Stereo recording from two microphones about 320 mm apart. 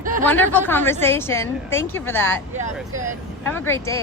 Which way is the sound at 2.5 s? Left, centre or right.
Right.